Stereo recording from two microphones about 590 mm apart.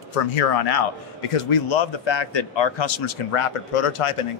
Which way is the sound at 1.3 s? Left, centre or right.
Left.